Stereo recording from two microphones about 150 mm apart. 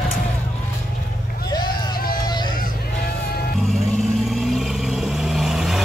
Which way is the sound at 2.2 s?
30° left (ahead or behind).